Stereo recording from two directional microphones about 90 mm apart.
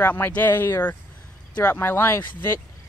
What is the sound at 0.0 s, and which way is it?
Speech, 20° left (ahead or behind).